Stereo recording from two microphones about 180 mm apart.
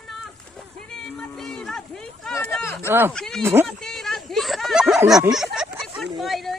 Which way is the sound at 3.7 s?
Centre (ahead or behind).